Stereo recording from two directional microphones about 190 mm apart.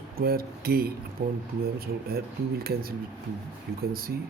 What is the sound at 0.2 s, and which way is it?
Speech, 55° right (ahead or behind).